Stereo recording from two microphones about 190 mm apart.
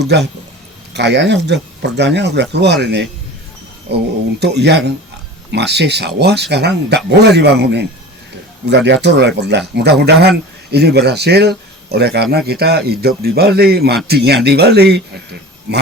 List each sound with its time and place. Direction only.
0.0 s speech: 60° right (ahead or behind)